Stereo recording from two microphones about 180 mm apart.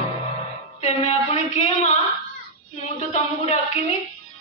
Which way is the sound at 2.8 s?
40° left (ahead or behind).